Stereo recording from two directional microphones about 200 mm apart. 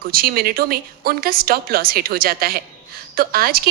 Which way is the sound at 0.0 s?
50° right (ahead or behind).